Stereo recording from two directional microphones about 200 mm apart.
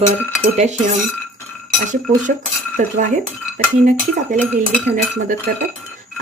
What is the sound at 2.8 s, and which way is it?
Speech, 40° right (ahead or behind).